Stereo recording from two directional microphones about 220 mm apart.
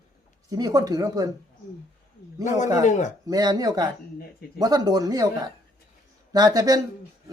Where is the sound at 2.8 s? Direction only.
35° left (ahead or behind).